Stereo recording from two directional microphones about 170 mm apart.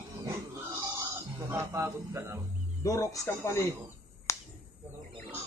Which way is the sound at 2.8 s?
20° left (ahead or behind).